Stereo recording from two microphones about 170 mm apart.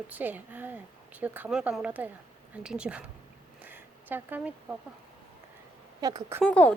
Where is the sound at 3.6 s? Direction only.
10° right (ahead or behind).